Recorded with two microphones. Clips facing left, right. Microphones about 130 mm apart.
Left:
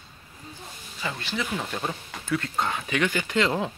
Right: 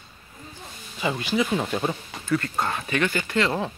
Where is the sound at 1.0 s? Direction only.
15° right (ahead or behind).